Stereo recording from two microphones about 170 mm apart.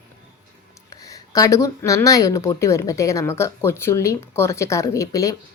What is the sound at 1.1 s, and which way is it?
Speech, 20° left (ahead or behind).